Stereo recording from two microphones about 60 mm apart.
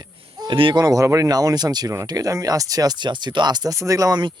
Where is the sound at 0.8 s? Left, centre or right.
Right.